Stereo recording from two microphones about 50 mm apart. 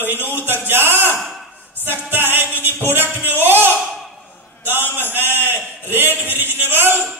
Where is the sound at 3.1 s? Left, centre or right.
Right.